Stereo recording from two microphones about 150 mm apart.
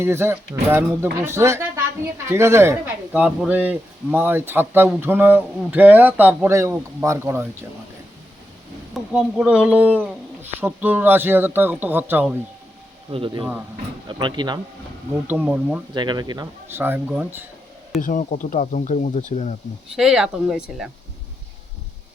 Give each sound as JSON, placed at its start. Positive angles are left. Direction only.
{"t": 0.0, "sound": "speech", "side_deg": -15}
{"t": 3.1, "sound": "speech", "side_deg": -5}
{"t": 8.9, "sound": "speech", "side_deg": -5}
{"t": 13.1, "sound": "speech", "side_deg": -35}
{"t": 15.3, "sound": "speech", "side_deg": -10}
{"t": 16.0, "sound": "speech", "side_deg": -30}
{"t": 16.7, "sound": "speech", "side_deg": -15}
{"t": 18.0, "sound": "speech", "side_deg": 60}
{"t": 20.0, "sound": "speech", "side_deg": -5}